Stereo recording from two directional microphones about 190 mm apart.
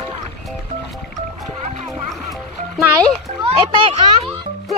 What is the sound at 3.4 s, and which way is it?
Children playing, 30° right (ahead or behind).